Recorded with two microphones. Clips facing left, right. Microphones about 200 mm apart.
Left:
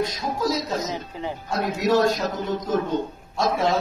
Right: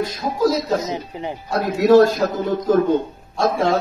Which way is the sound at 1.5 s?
60° right (ahead or behind).